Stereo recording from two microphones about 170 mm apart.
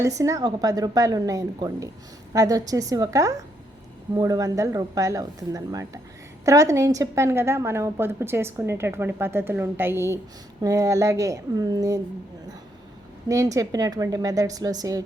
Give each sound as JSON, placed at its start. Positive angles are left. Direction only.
{"t": 0.0, "sound": "a woman's voice", "side_deg": -20}
{"t": 13.2, "sound": "speech", "side_deg": -20}